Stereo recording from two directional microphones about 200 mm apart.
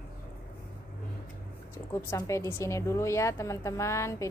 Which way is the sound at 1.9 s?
15° left (ahead or behind).